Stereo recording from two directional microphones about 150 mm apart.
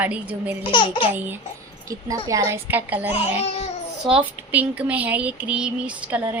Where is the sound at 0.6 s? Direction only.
30° left (ahead or behind).